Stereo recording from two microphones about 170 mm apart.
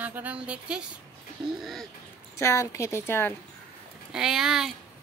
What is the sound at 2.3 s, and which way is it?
Speech, 15° left (ahead or behind).